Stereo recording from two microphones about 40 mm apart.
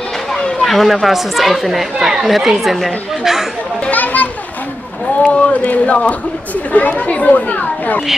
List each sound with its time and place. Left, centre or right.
0.6 s a sound: centre
1.0 s speech: centre
2.0 s speech: centre
2.2 s speech: centre
3.9 s children playing: left
5.2 s speech: left